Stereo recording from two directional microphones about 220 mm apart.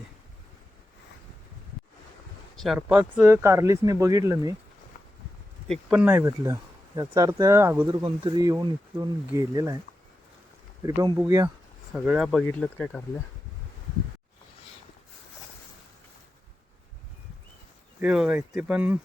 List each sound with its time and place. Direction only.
2.6 s speech: 5° right (ahead or behind)
5.6 s speech: centre (ahead or behind)
7.9 s speech: 20° right (ahead or behind)
10.8 s speech: 20° right (ahead or behind); by 13.0 s 5° left (ahead or behind)
18.0 s speech: 5° right (ahead or behind)